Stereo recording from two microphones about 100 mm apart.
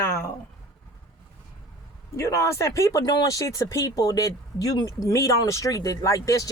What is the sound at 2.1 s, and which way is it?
Speech, 30° left (ahead or behind).